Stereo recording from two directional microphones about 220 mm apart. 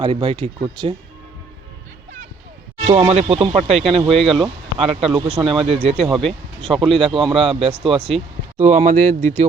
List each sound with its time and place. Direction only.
0.0 s speech: 25° right (ahead or behind)
2.8 s speech: 30° right (ahead or behind)
4.1 s speech: centre (ahead or behind)
5.4 s speech: 25° right (ahead or behind)
6.0 s speech: centre (ahead or behind)
7.0 s speech: 25° right (ahead or behind)